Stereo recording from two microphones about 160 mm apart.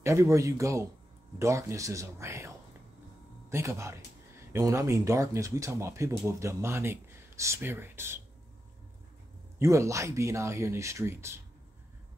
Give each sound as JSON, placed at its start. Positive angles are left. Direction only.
{"t": 0.0, "sound": "speech", "side_deg": -20}
{"t": 9.6, "sound": "speech", "side_deg": -20}